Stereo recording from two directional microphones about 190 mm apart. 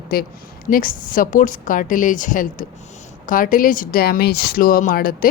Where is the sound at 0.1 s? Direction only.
50° left (ahead or behind).